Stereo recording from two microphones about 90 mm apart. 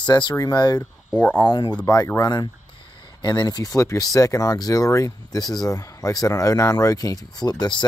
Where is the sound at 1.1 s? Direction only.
15° left (ahead or behind).